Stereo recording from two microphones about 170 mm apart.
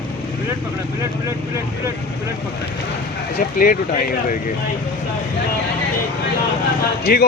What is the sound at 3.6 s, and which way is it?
Speech, 55° left (ahead or behind).